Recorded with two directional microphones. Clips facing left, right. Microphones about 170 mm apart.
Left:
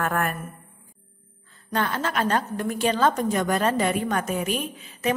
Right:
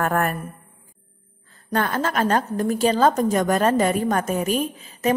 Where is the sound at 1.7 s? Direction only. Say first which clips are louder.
Right 3 dB; 45° right (ahead or behind).